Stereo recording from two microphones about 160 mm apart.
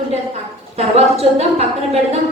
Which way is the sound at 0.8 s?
40° right (ahead or behind).